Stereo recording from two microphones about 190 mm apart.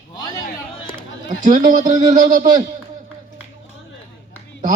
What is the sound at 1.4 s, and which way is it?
Speech, 40° right (ahead or behind).